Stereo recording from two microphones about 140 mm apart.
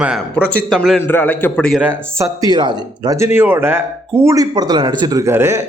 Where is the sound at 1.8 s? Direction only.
15° right (ahead or behind).